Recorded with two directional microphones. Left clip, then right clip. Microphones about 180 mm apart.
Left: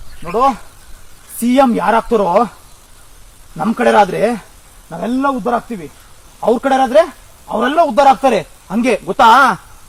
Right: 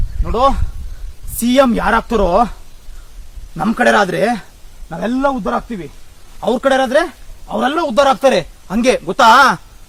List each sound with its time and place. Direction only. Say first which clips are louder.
1.4 s a man's voice: even; 35° right (ahead or behind)
3.6 s a man's voice: left 1 dB; 35° right (ahead or behind)